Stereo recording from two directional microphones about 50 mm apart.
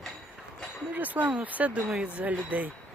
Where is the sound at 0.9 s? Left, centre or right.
Right.